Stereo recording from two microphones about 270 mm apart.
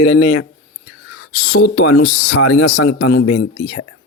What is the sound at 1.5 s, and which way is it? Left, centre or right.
A man's voice, left.